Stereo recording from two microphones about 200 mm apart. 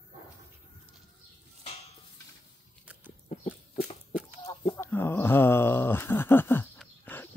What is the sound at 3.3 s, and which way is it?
Dog, 35° left (ahead or behind).